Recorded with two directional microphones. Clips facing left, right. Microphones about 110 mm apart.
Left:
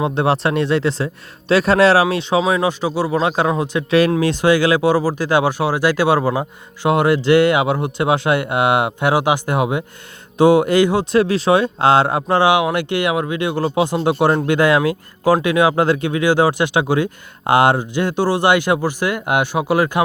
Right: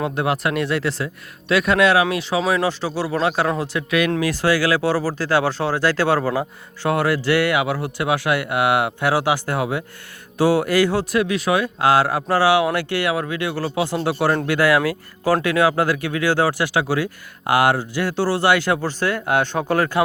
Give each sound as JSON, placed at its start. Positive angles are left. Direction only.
{"t": 0.0, "sound": "speech", "side_deg": 25}
{"t": 11.2, "sound": "speech", "side_deg": 30}